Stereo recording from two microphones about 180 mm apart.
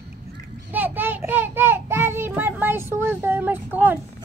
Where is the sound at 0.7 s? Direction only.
10° right (ahead or behind).